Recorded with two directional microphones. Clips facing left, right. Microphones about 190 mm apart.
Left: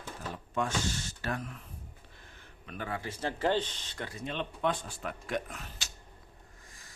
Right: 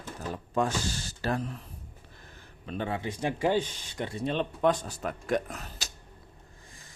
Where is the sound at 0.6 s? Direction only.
35° right (ahead or behind).